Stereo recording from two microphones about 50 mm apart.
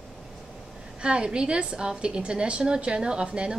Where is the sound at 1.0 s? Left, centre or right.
Right.